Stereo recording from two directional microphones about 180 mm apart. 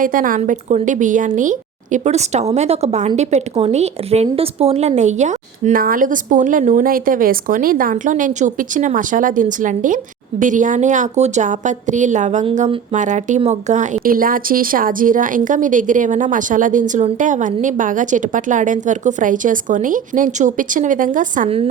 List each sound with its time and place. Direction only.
0.0 s a woman's voice: 50° right (ahead or behind)